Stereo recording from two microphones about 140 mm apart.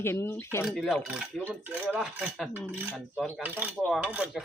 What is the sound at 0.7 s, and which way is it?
Speech, centre (ahead or behind).